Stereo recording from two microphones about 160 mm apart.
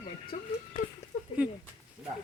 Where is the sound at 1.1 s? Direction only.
55° left (ahead or behind).